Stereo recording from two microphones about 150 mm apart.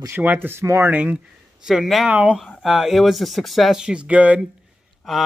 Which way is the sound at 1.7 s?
Centre (ahead or behind).